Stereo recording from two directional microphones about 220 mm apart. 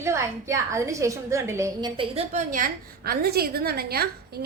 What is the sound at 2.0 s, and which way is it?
A woman's voice, 30° right (ahead or behind).